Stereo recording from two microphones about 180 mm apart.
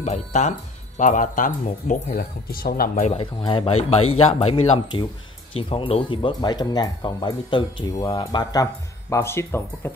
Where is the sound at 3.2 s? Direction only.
25° left (ahead or behind).